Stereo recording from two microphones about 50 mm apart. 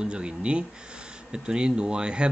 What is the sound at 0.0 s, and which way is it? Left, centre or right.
Speech, right.